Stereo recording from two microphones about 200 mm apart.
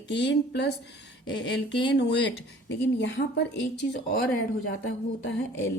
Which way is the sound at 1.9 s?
60° left (ahead or behind).